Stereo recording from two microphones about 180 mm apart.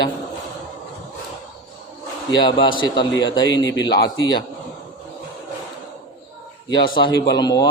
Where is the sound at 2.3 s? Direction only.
25° left (ahead or behind).